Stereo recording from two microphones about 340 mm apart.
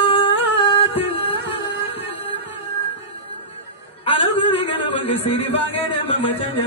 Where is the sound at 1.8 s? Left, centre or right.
Centre.